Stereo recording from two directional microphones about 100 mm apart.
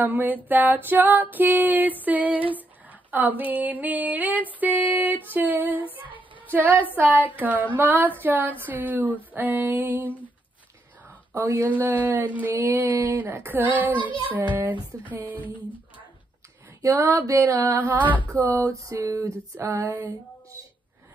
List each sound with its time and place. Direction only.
0.0 s female singing: 20° right (ahead or behind)
11.1 s a sound: 20° right (ahead or behind)
11.7 s female singing: 20° right (ahead or behind)
16.9 s female singing: 30° right (ahead or behind)
17.7 s female singing: 20° right (ahead or behind)
18.4 s a sound: 35° right (ahead or behind)